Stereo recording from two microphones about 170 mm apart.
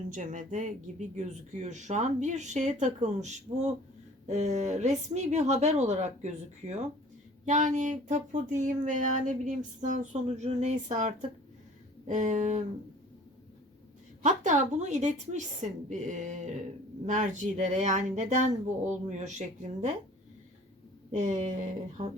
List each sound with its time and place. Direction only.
0.1 s speech: 45° right (ahead or behind)
14.2 s speech: 45° right (ahead or behind)
21.1 s speech: 45° right (ahead or behind)